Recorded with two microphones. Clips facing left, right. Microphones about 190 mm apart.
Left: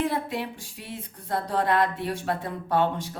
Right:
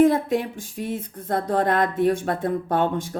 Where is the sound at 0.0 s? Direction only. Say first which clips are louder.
Right 10 dB; 45° right (ahead or behind).